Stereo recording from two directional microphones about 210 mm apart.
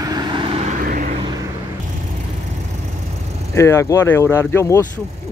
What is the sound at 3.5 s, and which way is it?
Speech, 15° left (ahead or behind).